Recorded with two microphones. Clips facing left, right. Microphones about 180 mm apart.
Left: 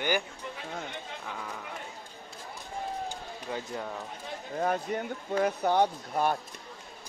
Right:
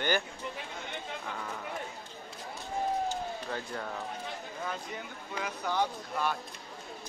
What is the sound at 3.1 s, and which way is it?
Run, 15° left (ahead or behind).